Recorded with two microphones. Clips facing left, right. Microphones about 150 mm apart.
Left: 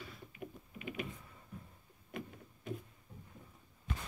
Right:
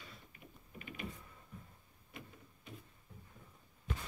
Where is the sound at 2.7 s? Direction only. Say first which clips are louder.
Left 11 dB; 50° left (ahead or behind).